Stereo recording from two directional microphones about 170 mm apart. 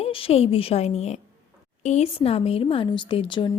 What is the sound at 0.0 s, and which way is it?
Speech, 35° left (ahead or behind).